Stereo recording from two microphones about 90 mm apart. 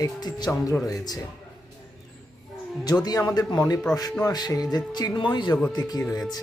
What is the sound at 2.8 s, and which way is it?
Speech, 50° left (ahead or behind).